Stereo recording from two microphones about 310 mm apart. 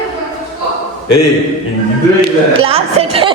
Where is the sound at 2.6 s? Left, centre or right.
Centre.